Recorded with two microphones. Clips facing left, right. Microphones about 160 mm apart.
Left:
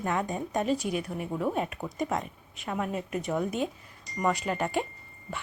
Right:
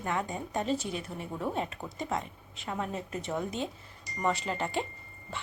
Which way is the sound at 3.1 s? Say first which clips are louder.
Left 4 dB; 25° right (ahead or behind).